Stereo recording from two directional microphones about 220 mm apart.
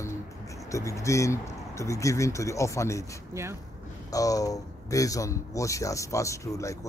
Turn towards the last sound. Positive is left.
turn(degrees=15)  # may be behind; listen again after turning